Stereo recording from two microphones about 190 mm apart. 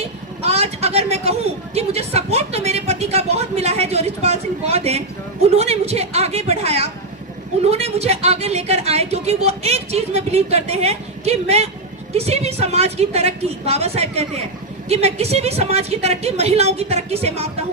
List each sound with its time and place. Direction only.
0.4 s a man's voice: 35° right (ahead or behind)